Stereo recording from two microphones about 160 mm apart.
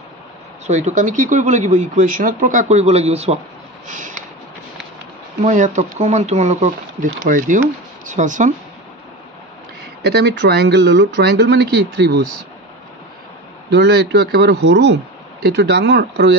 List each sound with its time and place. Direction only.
0.7 s speech: 45° right (ahead or behind)
3.8 s a sound: 50° right (ahead or behind)
5.4 s speech: 50° right (ahead or behind)
10.0 s speech: 90° right
13.7 s speech: 90° right